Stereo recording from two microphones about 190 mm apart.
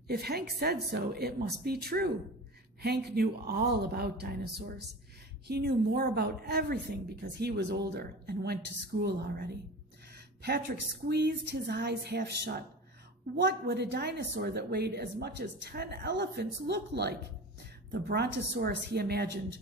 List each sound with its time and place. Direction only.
0.1 s a woman's voice: 55° right (ahead or behind)
10.1 s a sound: 55° right (ahead or behind)
11.1 s a woman's voice: 60° right (ahead or behind)